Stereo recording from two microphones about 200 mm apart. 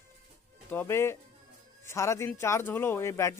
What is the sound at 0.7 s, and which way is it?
A man's voice, 10° left (ahead or behind).